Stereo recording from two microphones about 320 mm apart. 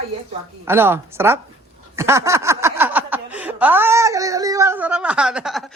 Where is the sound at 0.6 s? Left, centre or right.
Centre.